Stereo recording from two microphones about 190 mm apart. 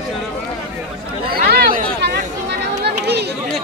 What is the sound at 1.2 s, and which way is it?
Chatter, 50° right (ahead or behind).